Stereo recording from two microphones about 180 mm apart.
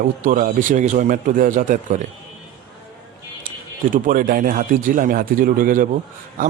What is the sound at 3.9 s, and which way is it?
Speech, 50° right (ahead or behind).